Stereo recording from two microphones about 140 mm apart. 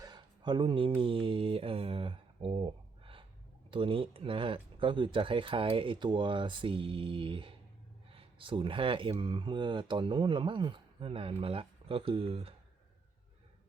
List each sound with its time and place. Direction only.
0.0 s mantra: 30° right (ahead or behind)
3.7 s speech: 35° right (ahead or behind)